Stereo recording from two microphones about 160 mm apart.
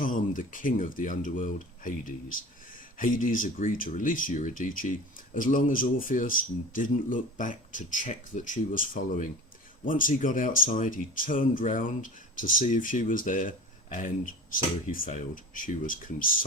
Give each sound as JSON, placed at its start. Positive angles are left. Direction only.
{"t": 0.0, "sound": "speech", "side_deg": 55}